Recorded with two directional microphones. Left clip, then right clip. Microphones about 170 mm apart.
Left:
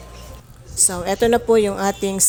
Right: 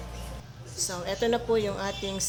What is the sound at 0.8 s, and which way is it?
Speech, 45° left (ahead or behind).